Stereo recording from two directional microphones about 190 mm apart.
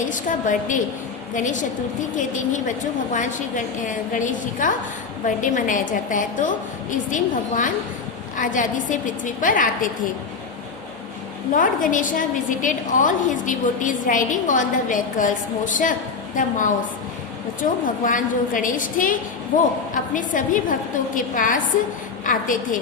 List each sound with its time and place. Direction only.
0.1 s a woman's voice: 45° left (ahead or behind)
11.5 s a woman's voice: 45° left (ahead or behind)